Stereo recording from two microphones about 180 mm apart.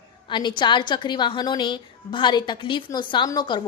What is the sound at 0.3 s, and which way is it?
A woman's voice, 25° left (ahead or behind).